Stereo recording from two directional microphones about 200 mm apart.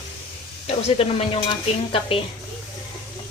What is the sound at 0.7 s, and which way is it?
A woman's voice, 30° left (ahead or behind).